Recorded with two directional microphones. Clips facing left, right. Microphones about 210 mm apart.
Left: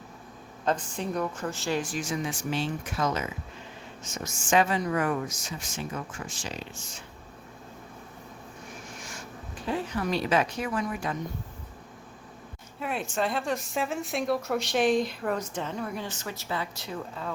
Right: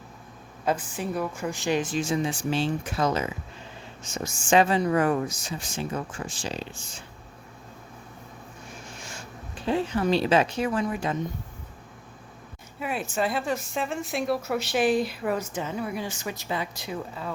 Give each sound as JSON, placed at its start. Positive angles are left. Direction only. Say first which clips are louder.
{"t": 0.6, "sound": "a woman's voice", "louder": "right 1 dB", "side_deg": -10}
{"t": 9.0, "sound": "a sound", "louder": "right 1 dB", "side_deg": -25}
{"t": 9.6, "sound": "speech", "louder": "right 5 dB", "side_deg": -25}
{"t": 12.8, "sound": "speech", "louder": "right 2 dB", "side_deg": -5}